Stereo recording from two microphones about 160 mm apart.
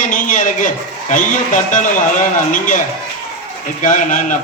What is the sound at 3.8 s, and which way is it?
Speech, 55° left (ahead or behind).